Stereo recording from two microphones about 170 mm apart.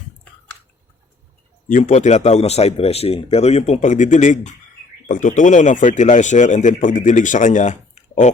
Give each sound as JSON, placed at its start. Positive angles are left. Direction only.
{"t": 1.6, "sound": "speech", "side_deg": 45}